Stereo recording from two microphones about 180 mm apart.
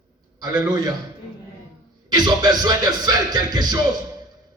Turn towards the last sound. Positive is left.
turn(degrees=-20)  # may be behind; listen again after turning